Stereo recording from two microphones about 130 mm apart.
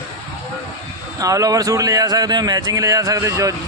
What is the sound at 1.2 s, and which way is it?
A man's voice, 25° right (ahead or behind).